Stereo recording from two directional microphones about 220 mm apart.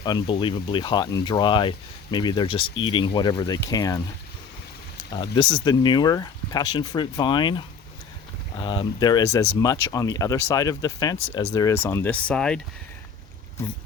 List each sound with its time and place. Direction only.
0.0 s speech: 20° left (ahead or behind)
5.1 s speech: 20° left (ahead or behind); by 12.5 s 5° left (ahead or behind)